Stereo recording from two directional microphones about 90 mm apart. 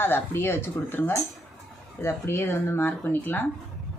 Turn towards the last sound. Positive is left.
turn(degrees=20)  # may be behind; listen again after turning